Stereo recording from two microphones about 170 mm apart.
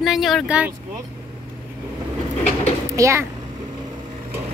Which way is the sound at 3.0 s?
15° right (ahead or behind).